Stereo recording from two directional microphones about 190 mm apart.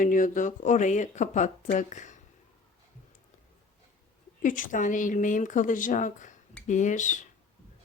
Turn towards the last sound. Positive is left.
turn(degrees=40)  # may be behind; listen again after turning